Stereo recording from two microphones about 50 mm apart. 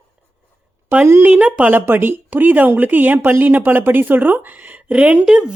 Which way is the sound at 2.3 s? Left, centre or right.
Right.